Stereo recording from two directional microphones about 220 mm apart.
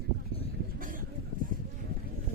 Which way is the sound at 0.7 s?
40° right (ahead or behind).